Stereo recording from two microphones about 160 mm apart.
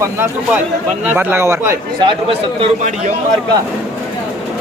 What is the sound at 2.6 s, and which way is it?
Speech, 45° right (ahead or behind).